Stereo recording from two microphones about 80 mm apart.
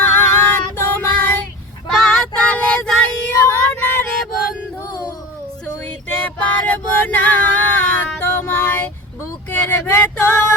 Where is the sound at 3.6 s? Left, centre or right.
Centre.